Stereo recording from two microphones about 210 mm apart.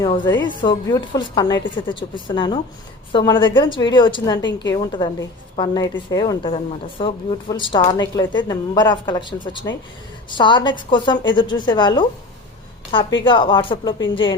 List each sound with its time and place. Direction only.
0.4 s a woman's voice: 20° left (ahead or behind)